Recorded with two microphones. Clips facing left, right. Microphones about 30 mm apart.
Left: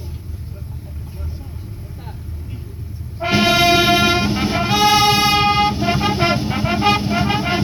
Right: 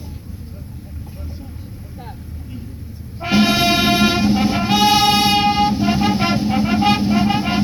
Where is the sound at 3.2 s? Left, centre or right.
Centre.